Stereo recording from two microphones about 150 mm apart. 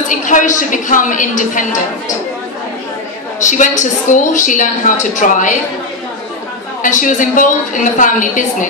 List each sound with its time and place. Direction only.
0.1 s a woman's voice: 60° left (ahead or behind)
3.3 s a woman's voice: 55° left (ahead or behind)
6.8 s a woman's voice: 60° left (ahead or behind)